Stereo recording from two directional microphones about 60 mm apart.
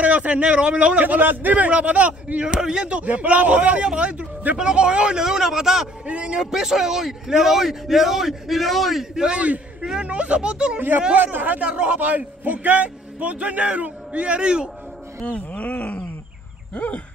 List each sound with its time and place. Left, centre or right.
0.0 s a man's voice: right
2.4 s a man's voice: centre
6.0 s a man's voice: centre
9.1 s a man's voice: centre
11.1 s a man's voice: right; by 14.7 s centre
15.2 s a sound: left